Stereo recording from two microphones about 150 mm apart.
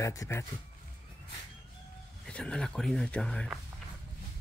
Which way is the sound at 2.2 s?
5° left (ahead or behind).